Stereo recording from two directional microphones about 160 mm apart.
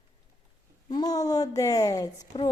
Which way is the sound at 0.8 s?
25° left (ahead or behind).